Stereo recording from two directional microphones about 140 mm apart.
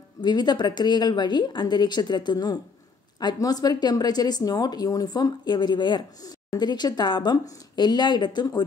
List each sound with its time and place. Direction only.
0.2 s a woman's voice: 30° left (ahead or behind)